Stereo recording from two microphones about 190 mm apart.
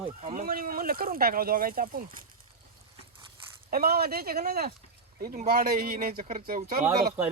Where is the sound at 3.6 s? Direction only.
50° right (ahead or behind).